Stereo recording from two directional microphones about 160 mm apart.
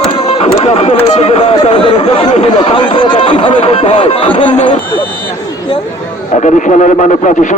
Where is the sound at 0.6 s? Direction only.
40° left (ahead or behind).